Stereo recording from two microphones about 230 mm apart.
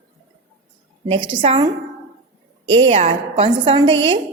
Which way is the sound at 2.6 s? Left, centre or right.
Right.